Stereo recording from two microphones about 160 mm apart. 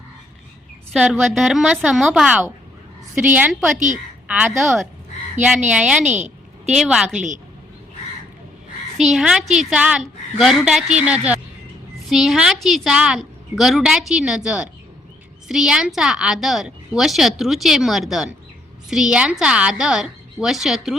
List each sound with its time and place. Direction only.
0.9 s a woman's voice: centre (ahead or behind)
3.8 s a woman's voice: 50° right (ahead or behind)
4.3 s a woman's voice: 5° right (ahead or behind)
9.0 s a woman's voice: centre (ahead or behind)